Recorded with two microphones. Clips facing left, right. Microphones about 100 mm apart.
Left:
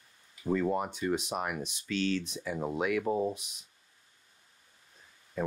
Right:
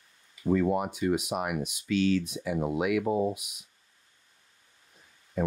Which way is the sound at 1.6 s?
35° left (ahead or behind).